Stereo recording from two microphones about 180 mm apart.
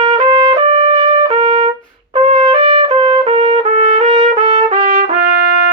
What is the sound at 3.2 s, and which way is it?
Trumpet, 40° right (ahead or behind).